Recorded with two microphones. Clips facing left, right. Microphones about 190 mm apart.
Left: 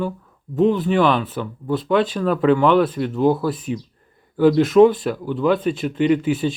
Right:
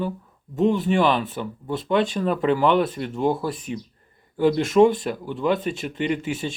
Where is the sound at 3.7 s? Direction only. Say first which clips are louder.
Left 5 dB; 40° left (ahead or behind).